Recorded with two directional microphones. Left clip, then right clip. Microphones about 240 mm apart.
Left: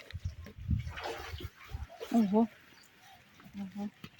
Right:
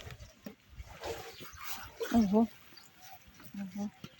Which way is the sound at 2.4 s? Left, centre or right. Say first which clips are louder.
Left 1 dB; right.